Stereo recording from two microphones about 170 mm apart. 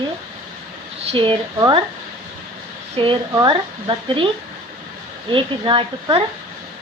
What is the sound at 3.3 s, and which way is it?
Speech, 20° right (ahead or behind).